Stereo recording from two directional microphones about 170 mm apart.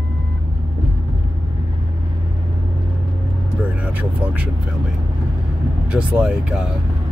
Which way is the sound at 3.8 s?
10° right (ahead or behind).